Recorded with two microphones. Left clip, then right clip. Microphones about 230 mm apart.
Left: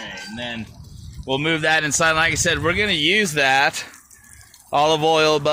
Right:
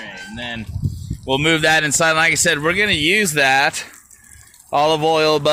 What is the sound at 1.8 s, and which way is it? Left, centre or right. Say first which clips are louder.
Speech: right 2 dB; right.